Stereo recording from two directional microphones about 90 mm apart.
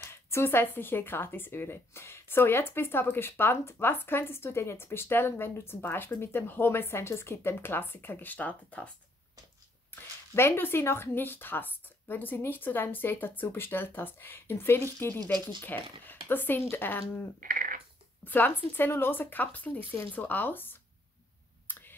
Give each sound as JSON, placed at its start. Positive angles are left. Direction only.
{"t": 0.1, "sound": "speech", "side_deg": 30}
{"t": 9.8, "sound": "speech", "side_deg": 25}
{"t": 18.2, "sound": "speech", "side_deg": 20}
{"t": 21.6, "sound": "clicking", "side_deg": 25}